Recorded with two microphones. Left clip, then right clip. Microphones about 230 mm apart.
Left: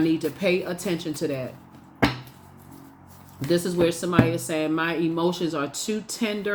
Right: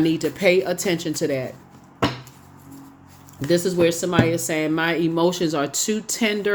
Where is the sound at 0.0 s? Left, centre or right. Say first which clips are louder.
Right 4 dB; right.